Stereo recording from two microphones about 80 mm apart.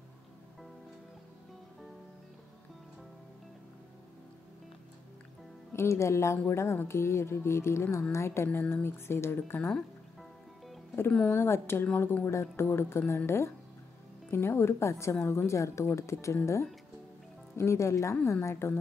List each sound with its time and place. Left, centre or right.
5.7 s speech: left
8.5 s speech: left
11.1 s speech: centre
11.3 s speech: left
14.3 s speech: left
17.6 s speech: left